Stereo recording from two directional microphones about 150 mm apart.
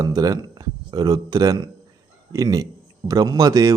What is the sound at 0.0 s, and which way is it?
Speech, 25° right (ahead or behind).